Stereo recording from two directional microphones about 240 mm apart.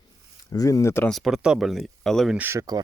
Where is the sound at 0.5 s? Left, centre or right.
Centre.